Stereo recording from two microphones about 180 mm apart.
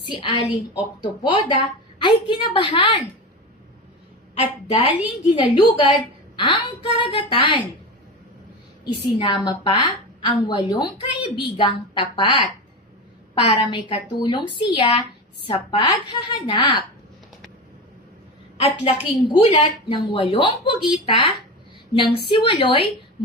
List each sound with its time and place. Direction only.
0.1 s a woman's voice: 30° left (ahead or behind)
4.4 s a woman's voice: 35° left (ahead or behind)
8.8 s a woman's voice: 25° left (ahead or behind)
18.6 s a woman's voice: 35° left (ahead or behind)